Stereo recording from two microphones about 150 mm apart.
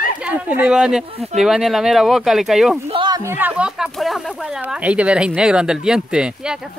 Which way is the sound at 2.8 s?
30° right (ahead or behind).